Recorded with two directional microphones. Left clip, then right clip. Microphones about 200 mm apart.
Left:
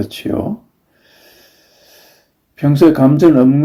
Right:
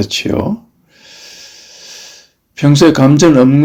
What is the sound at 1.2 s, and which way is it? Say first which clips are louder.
Hiss: right 12 dB; 15° right (ahead or behind).